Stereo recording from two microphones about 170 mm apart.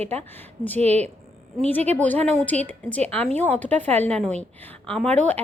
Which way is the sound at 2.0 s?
10° left (ahead or behind).